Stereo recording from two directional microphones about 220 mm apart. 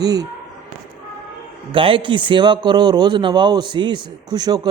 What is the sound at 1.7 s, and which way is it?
A man's voice, 25° right (ahead or behind).